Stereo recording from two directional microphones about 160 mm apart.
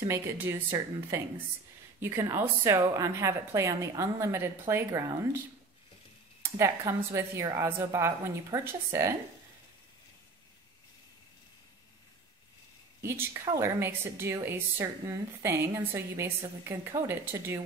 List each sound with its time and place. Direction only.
0.0 s speech: 15° right (ahead or behind)
6.4 s speech: 15° right (ahead or behind)
13.0 s speech: 15° right (ahead or behind)